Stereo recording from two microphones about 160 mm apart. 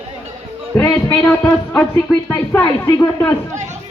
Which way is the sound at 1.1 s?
5° left (ahead or behind).